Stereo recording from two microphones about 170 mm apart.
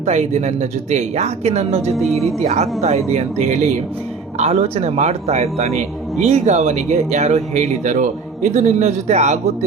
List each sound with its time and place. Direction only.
0.0 s speech: 40° right (ahead or behind)
2.0 s speech: centre (ahead or behind)
2.4 s speech: 40° right (ahead or behind)